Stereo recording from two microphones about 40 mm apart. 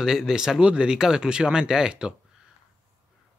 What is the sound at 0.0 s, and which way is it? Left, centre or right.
Speech, centre.